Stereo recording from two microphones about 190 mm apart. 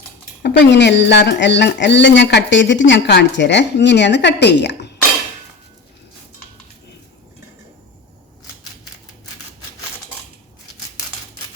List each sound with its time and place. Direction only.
0.4 s speech: 65° left (ahead or behind)